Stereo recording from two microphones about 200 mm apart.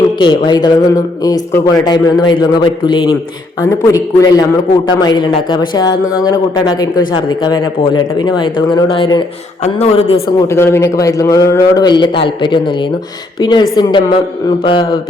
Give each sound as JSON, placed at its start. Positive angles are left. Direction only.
{"t": 0.2, "sound": "speech", "side_deg": 25}
{"t": 10.4, "sound": "speech", "side_deg": 15}